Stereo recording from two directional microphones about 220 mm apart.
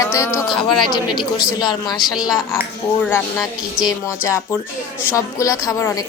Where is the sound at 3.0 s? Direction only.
5° left (ahead or behind).